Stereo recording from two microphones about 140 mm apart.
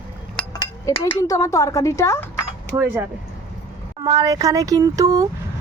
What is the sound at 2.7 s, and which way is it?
Speech, 15° right (ahead or behind).